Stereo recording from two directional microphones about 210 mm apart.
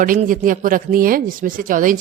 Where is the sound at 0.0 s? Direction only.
40° right (ahead or behind).